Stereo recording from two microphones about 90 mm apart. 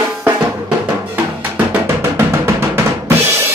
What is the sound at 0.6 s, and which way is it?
Drum, 15° right (ahead or behind).